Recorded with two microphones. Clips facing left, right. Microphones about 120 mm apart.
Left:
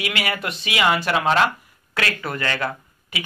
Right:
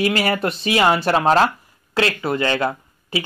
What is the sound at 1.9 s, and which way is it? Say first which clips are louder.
Speech: right 6 dB; 25° right (ahead or behind).